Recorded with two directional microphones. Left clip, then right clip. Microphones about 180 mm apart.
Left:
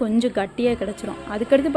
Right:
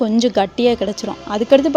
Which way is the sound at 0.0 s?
25° right (ahead or behind).